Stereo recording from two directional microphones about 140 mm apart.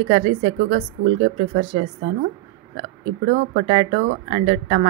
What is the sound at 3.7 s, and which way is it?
Speech, 55° right (ahead or behind).